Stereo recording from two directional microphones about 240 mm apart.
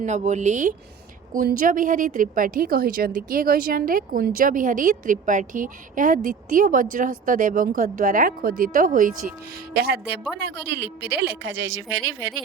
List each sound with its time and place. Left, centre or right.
0.0 s a woman's voice: right